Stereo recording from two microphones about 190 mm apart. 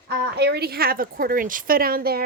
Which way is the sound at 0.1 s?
60° right (ahead or behind).